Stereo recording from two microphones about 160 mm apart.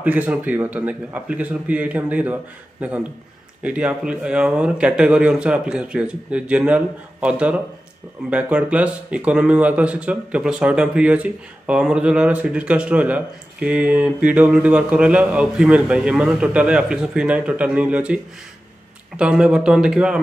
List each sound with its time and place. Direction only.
0.0 s speech: 10° right (ahead or behind)
3.6 s speech: 10° right (ahead or behind)